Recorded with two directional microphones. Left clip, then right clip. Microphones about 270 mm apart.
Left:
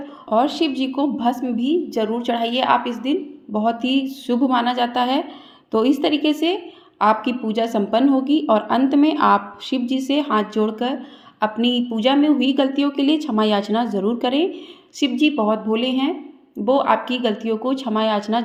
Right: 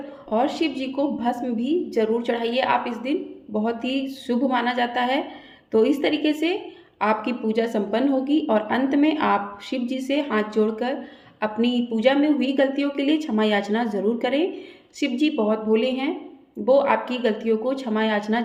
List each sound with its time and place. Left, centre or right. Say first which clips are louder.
0.3 s a woman's voice: left 4 dB; left